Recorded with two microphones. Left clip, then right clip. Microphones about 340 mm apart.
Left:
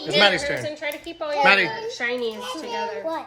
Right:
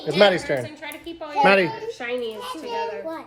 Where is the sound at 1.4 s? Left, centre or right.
Centre.